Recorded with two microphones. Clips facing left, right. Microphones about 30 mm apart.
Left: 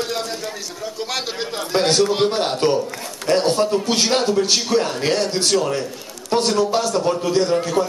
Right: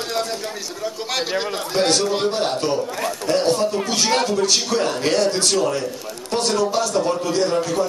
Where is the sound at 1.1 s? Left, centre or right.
Centre.